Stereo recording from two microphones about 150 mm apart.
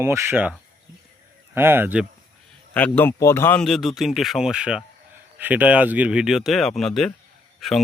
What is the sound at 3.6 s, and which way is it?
Speech, centre (ahead or behind).